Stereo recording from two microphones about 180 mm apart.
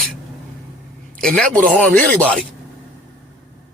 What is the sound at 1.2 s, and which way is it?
A man's voice, 5° left (ahead or behind).